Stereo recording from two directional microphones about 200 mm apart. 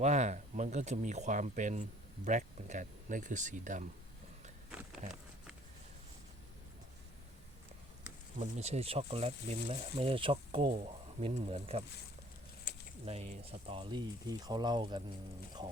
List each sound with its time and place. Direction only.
0.0 s speech: 35° right (ahead or behind)
5.0 s speech: 35° right (ahead or behind)
8.4 s speech: 35° right (ahead or behind)
13.1 s speech: 30° right (ahead or behind)